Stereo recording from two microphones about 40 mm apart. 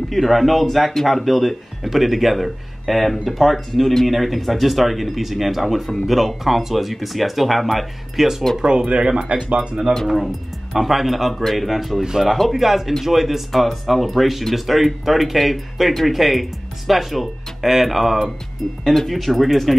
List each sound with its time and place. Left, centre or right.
0.1 s speech: centre
8.5 s speech: right
10.0 s speech: centre